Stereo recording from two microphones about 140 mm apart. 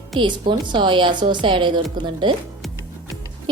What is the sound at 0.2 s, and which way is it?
A woman's voice, 35° right (ahead or behind).